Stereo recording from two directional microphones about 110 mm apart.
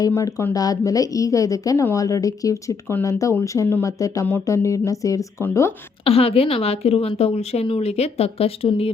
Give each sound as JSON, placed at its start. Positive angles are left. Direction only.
{"t": 0.2, "sound": "a woman's voice", "side_deg": 30}
{"t": 6.1, "sound": "a woman's voice", "side_deg": 65}